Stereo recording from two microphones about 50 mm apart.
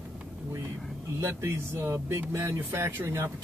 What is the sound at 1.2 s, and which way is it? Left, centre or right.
Speech, right.